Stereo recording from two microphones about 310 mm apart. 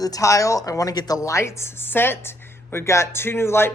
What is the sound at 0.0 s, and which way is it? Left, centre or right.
A woman's voice, centre.